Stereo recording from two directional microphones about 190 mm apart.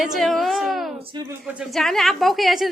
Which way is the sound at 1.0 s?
25° right (ahead or behind).